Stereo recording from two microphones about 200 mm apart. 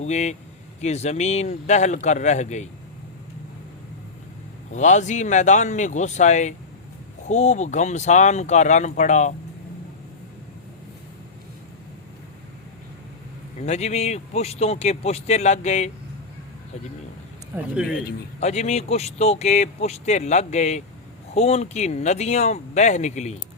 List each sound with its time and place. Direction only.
0.0 s speech: 35° left (ahead or behind)
4.7 s speech: 35° left (ahead or behind)
13.6 s speech: 35° left (ahead or behind)
17.5 s speech: 5° right (ahead or behind)
18.3 s speech: 35° left (ahead or behind)